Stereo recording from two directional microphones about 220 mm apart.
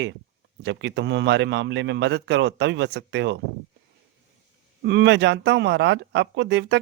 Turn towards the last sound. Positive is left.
turn(degrees=-50)  # may be behind; listen again after turning